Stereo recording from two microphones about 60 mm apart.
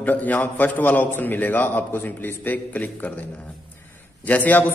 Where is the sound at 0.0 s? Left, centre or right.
Left.